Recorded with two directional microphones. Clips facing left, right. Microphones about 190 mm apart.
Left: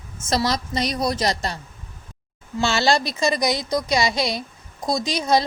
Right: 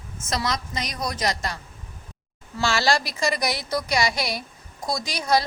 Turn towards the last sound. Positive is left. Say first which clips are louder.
# left 3 dB
turn(degrees=25)  # may be behind; listen again after turning